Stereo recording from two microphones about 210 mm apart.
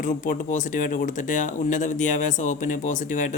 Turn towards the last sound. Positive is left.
turn(degrees=35)  # may be behind; listen again after turning